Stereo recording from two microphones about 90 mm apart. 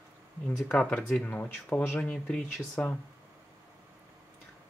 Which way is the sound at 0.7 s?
10° left (ahead or behind).